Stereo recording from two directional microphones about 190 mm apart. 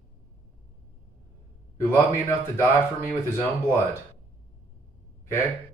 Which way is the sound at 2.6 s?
10° left (ahead or behind).